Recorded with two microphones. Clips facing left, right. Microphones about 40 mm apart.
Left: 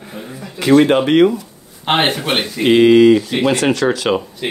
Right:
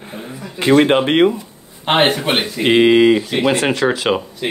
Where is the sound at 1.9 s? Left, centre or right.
Centre.